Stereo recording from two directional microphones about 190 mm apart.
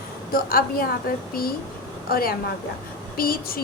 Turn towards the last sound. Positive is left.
turn(degrees=50)  # may be behind; listen again after turning